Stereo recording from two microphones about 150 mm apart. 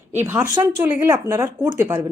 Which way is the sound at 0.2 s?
15° right (ahead or behind).